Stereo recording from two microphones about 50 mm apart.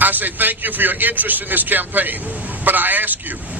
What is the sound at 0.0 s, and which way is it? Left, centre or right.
A man's voice, right.